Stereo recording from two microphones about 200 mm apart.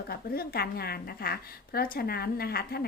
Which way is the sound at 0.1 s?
50° left (ahead or behind).